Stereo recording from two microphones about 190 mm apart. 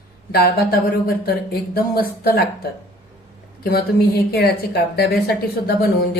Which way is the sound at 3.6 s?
55° left (ahead or behind).